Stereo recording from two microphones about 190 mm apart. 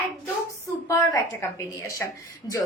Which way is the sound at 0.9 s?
15° left (ahead or behind).